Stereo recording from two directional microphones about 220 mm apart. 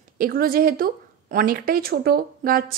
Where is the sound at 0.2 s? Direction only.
40° right (ahead or behind).